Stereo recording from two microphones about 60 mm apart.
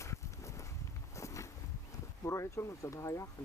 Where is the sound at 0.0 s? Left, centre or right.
Left.